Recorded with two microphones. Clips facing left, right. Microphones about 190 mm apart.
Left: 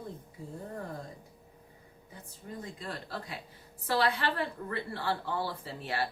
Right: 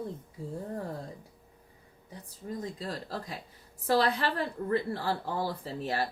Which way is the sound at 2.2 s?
35° right (ahead or behind).